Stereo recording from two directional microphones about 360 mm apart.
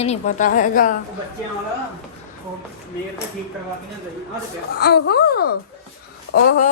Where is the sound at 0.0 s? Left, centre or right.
Centre.